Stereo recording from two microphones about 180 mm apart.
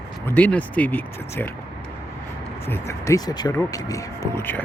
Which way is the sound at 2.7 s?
15° left (ahead or behind).